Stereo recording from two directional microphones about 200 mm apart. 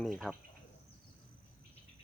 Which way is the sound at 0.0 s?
Centre (ahead or behind).